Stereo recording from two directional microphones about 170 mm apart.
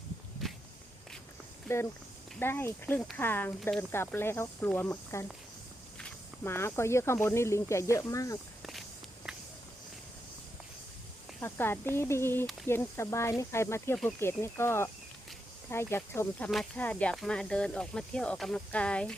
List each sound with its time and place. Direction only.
1.6 s speech: 15° left (ahead or behind)
9.3 s walk: 5° right (ahead or behind)
11.3 s speech: 15° left (ahead or behind)